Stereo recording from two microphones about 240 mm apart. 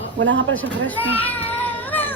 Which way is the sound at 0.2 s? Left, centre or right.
Right.